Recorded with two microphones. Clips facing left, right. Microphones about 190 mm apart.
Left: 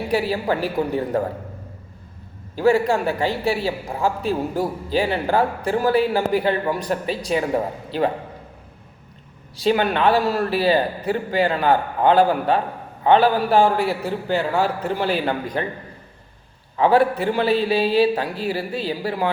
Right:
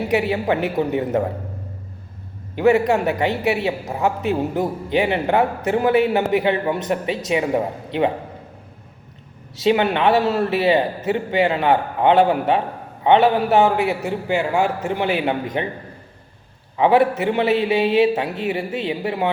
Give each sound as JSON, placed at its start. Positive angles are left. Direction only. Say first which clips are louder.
{"t": 0.1, "sound": "a man's voice", "louder": "right 1 dB", "side_deg": -20}
{"t": 2.6, "sound": "a man's voice", "louder": "right 2 dB", "side_deg": -20}
{"t": 9.6, "sound": "a man's voice", "louder": "right 2 dB", "side_deg": -25}
{"t": 16.7, "sound": "a man's voice", "louder": "right 1 dB", "side_deg": -20}